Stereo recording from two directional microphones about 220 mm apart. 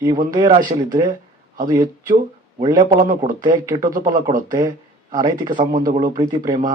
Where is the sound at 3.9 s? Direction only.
35° right (ahead or behind).